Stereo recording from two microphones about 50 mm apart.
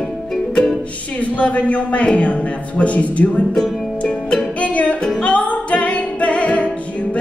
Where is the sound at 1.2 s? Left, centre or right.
Left.